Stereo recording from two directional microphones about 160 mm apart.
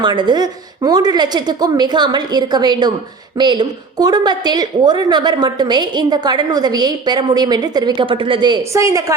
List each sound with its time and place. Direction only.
0.0 s a woman's voice: 30° right (ahead or behind)